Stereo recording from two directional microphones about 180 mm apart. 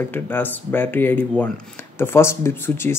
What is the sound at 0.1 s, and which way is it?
Speech, 10° left (ahead or behind).